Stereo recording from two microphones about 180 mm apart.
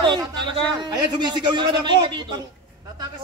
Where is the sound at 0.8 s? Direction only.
25° right (ahead or behind).